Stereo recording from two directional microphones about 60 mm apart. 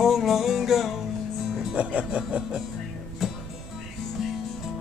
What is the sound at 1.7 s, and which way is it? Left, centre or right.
Music, right.